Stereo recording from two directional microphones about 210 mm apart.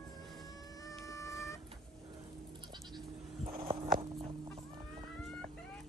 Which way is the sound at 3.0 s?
25° right (ahead or behind).